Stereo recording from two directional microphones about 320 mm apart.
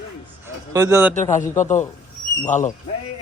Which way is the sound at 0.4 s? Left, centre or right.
Centre.